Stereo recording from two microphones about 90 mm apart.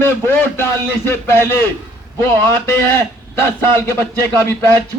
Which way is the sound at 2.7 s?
25° left (ahead or behind).